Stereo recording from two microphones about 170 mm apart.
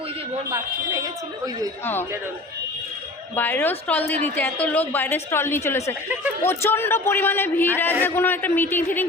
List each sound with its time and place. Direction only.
0.5 s speech: 20° right (ahead or behind)
1.8 s a man's voice: 15° left (ahead or behind)
3.3 s a man's voice: 10° left (ahead or behind)